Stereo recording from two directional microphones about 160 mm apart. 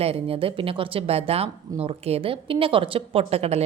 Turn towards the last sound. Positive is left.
turn(degrees=-40)  # may be behind; listen again after turning